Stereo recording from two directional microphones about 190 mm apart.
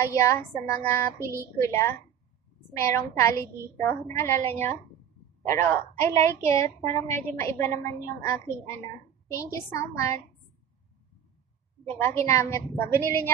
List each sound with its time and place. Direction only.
0.0 s a woman's voice: 15° left (ahead or behind)
1.2 s speech: 15° right (ahead or behind)
1.6 s a woman's voice: 15° left (ahead or behind)
6.8 s a woman's voice: 35° right (ahead or behind)
7.2 s a woman's voice: 15° left (ahead or behind)
11.9 s a woman's voice: 10° left (ahead or behind)